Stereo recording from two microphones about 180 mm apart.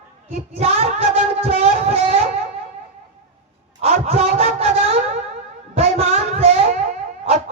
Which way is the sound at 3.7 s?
40° right (ahead or behind).